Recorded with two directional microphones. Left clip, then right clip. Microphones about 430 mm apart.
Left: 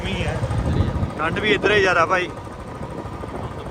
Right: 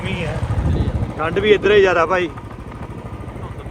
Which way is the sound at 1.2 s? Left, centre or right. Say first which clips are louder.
Right 4 dB; centre.